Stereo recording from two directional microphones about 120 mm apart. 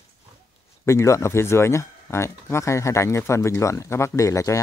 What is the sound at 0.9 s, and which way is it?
Speech, 25° left (ahead or behind).